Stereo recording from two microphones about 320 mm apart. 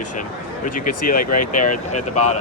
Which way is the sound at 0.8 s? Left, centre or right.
Left.